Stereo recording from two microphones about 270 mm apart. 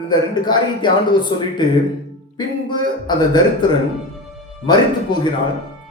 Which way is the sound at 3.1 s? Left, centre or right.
Centre.